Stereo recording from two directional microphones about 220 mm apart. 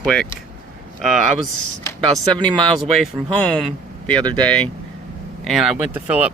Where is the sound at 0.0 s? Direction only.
Centre (ahead or behind).